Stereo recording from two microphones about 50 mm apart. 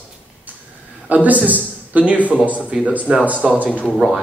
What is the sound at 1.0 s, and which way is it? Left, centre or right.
A man's voice, right.